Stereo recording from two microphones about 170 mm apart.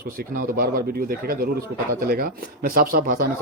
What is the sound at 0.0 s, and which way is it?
Speech, 55° right (ahead or behind).